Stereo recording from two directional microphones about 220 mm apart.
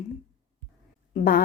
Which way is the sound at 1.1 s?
40° left (ahead or behind).